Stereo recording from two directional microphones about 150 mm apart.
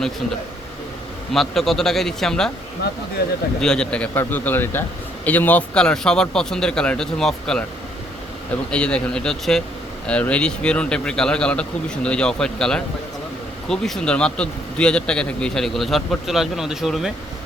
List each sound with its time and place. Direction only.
1.3 s a man's voice: centre (ahead or behind)
3.2 s a man's voice: 90° left
3.6 s a man's voice: 5° left (ahead or behind)
8.7 s a man's voice: 5° left (ahead or behind)